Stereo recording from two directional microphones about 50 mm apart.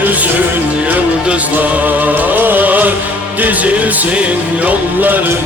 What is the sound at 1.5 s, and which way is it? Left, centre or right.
Music, right.